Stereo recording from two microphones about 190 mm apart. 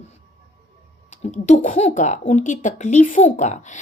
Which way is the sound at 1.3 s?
35° left (ahead or behind).